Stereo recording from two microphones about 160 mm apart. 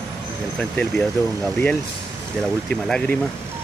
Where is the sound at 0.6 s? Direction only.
5° left (ahead or behind).